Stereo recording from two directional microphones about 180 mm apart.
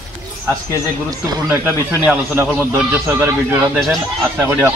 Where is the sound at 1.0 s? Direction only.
20° right (ahead or behind).